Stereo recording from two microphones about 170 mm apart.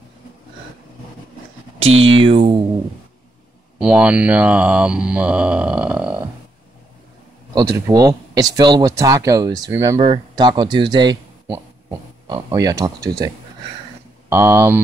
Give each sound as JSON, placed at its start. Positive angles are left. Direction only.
{"t": 2.1, "sound": "speech", "side_deg": -30}
{"t": 3.7, "sound": "speech", "side_deg": -5}
{"t": 7.5, "sound": "speech", "side_deg": -15}
{"t": 9.9, "sound": "speech", "side_deg": -30}
{"t": 14.3, "sound": "speech", "side_deg": -15}